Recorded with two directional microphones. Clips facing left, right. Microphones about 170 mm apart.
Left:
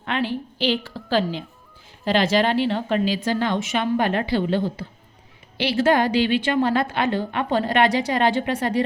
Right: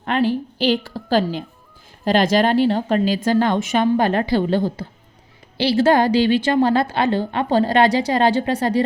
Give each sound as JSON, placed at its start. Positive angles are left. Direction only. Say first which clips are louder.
{"t": 0.0, "sound": "a woman's voice", "louder": "right 6 dB", "side_deg": -40}